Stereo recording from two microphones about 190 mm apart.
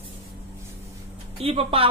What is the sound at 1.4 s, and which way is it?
Speech, 30° right (ahead or behind).